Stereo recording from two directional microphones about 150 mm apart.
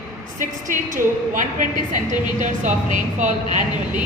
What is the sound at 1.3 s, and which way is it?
A woman's voice, 60° right (ahead or behind).